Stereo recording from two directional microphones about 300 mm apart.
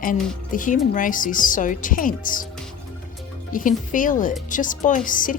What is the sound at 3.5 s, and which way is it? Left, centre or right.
Speech, left.